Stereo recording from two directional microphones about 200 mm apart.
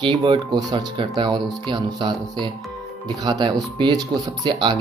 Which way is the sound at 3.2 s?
20° right (ahead or behind).